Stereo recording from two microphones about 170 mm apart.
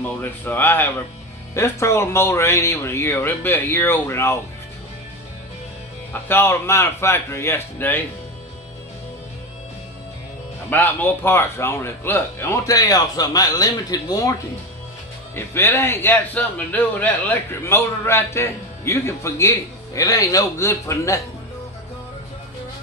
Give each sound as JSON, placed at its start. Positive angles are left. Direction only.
{"t": 0.2, "sound": "speech", "side_deg": 10}
{"t": 6.2, "sound": "speech", "side_deg": 15}
{"t": 10.7, "sound": "speech", "side_deg": 10}
{"t": 15.3, "sound": "speech", "side_deg": 15}